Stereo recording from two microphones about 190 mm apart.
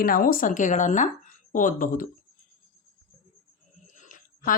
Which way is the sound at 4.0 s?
45° left (ahead or behind).